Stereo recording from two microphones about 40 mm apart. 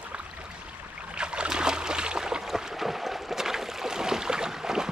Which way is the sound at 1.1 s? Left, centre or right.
Right.